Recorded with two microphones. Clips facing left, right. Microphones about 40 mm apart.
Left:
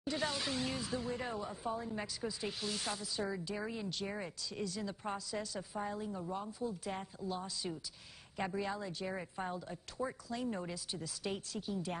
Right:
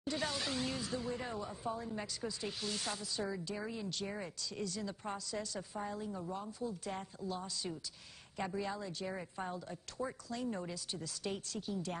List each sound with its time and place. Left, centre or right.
0.1 s a woman's voice: centre